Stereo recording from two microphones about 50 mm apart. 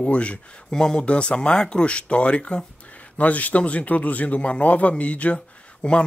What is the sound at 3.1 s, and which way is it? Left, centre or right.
Speech, left.